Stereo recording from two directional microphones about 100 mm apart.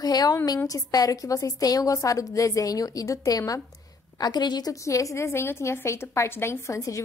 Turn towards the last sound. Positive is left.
turn(degrees=30)  # may be behind; listen again after turning